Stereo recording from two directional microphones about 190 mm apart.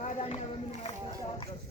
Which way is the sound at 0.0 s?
35° left (ahead or behind).